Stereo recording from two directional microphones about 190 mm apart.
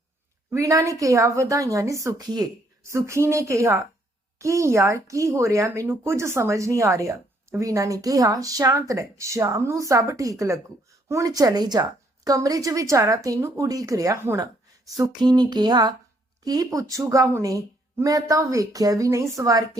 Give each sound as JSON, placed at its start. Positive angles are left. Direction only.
{"t": 0.5, "sound": "speech", "side_deg": -15}
{"t": 14.9, "sound": "a sound", "side_deg": -20}
{"t": 16.4, "sound": "speech", "side_deg": -20}